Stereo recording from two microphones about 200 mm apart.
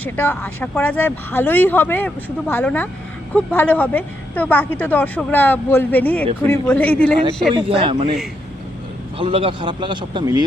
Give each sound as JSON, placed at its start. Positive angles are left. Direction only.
{"t": 0.0, "sound": "speech", "side_deg": 10}
{"t": 7.8, "sound": "a man's voice", "side_deg": -25}
{"t": 9.1, "sound": "a man's voice", "side_deg": -25}